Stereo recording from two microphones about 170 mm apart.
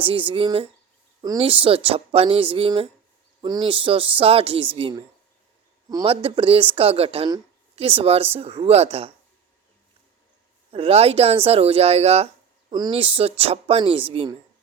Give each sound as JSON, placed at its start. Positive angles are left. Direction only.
{"t": 0.0, "sound": "speech", "side_deg": -30}
{"t": 10.7, "sound": "speech", "side_deg": -35}